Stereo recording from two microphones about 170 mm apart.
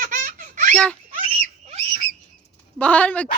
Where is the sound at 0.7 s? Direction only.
5° left (ahead or behind).